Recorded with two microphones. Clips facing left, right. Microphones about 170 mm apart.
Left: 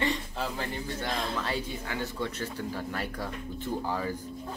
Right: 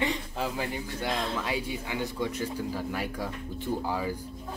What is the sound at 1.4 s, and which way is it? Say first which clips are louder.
Speech: right 1 dB; 10° right (ahead or behind).